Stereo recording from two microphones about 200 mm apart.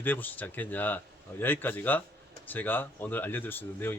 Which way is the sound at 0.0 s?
10° left (ahead or behind).